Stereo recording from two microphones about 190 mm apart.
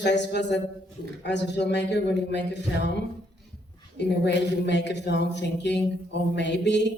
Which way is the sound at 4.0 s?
65° left (ahead or behind).